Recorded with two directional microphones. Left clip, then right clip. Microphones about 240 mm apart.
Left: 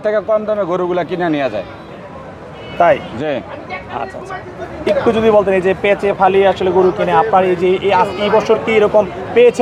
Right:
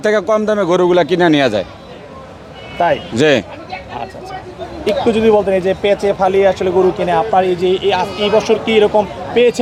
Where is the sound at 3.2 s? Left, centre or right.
Right.